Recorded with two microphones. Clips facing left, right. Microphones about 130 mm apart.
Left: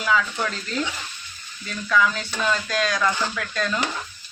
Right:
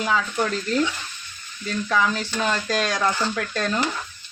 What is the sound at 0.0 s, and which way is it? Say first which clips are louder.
Speech: left 1 dB; 30° right (ahead or behind).